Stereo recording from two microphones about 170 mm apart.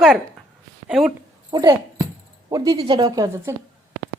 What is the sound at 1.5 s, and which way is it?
A woman's voice, 20° right (ahead or behind).